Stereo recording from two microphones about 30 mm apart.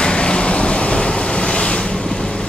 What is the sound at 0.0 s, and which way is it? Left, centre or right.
Vehicle, left.